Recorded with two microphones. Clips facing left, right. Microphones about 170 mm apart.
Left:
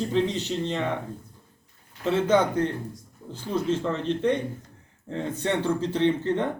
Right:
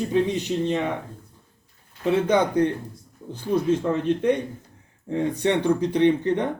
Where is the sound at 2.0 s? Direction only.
15° right (ahead or behind).